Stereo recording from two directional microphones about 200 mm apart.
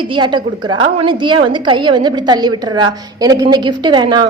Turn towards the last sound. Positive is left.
turn(degrees=-20)  # may be behind; listen again after turning